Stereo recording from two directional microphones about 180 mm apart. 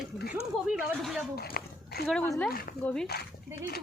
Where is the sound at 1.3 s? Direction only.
60° left (ahead or behind).